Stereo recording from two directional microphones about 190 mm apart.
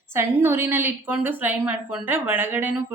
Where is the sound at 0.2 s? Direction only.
15° right (ahead or behind).